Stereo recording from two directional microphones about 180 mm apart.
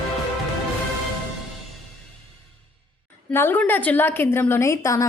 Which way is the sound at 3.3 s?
10° left (ahead or behind).